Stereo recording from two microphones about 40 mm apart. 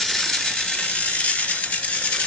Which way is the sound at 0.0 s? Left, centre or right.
Centre.